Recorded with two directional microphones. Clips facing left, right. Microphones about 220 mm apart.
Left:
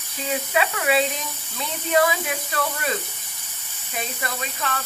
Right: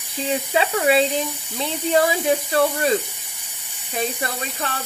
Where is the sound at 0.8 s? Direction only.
30° right (ahead or behind).